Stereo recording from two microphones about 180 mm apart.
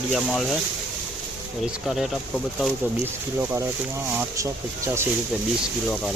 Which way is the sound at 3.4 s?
10° right (ahead or behind).